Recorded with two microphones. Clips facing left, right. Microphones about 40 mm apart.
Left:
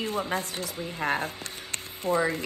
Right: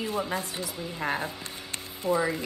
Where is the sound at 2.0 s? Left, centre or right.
Left.